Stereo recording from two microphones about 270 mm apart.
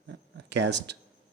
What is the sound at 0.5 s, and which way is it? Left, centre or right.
Speech, right.